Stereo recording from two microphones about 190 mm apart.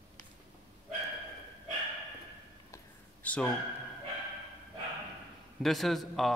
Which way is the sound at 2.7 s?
5° left (ahead or behind).